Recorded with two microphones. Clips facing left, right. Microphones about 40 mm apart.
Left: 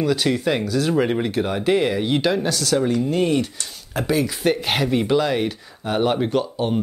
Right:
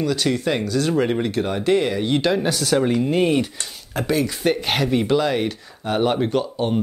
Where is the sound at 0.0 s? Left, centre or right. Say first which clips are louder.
Left 1 dB; centre.